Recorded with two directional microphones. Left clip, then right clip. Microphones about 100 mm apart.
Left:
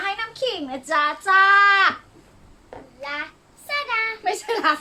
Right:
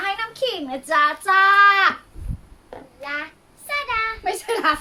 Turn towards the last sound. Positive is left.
turn(degrees=-15)  # may be behind; listen again after turning